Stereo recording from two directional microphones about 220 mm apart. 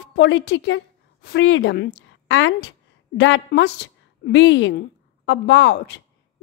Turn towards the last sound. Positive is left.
turn(degrees=50)  # may be behind; listen again after turning